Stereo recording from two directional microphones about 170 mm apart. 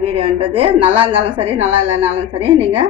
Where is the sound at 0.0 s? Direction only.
35° right (ahead or behind).